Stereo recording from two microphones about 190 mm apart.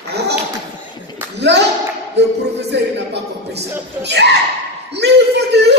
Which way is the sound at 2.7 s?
65° right (ahead or behind).